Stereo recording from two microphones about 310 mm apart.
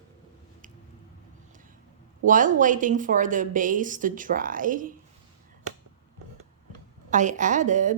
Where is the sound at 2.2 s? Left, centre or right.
Right.